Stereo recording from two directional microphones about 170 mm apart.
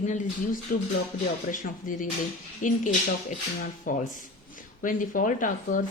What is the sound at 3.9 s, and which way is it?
A woman's voice, 50° left (ahead or behind).